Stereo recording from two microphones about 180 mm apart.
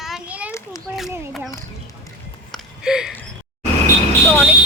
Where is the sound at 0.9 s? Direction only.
Centre (ahead or behind).